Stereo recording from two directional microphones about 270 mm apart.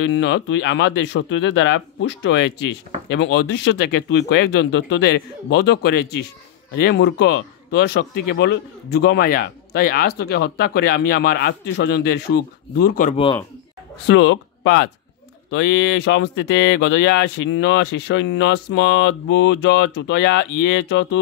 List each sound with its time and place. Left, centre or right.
0.0 s speech: left
14.0 s speech: left
15.9 s speech: left